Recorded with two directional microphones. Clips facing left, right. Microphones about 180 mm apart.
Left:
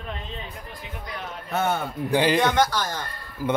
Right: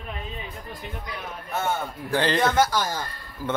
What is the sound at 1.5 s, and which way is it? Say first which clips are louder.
Speech: left 3 dB; 65° left (ahead or behind).